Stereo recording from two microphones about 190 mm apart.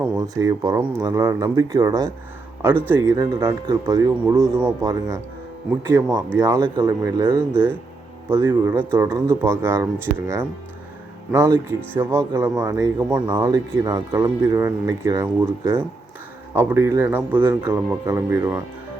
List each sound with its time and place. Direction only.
0.0 s speech: 20° right (ahead or behind)
11.3 s speech: 15° right (ahead or behind)